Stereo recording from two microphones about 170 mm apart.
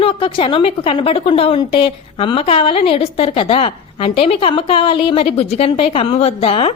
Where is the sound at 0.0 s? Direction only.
30° left (ahead or behind).